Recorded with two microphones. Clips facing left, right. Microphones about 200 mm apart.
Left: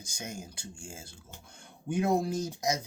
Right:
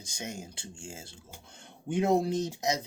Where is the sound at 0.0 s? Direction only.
25° right (ahead or behind).